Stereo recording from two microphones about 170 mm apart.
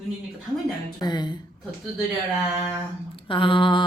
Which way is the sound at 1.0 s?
25° left (ahead or behind).